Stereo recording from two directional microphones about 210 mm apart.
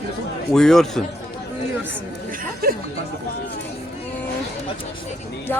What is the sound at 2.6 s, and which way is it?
Speech, 45° right (ahead or behind).